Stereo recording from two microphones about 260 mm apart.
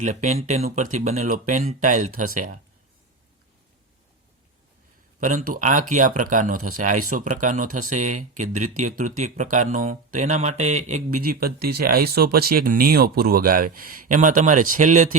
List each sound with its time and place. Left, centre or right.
0.0 s speech: right
5.2 s speech: right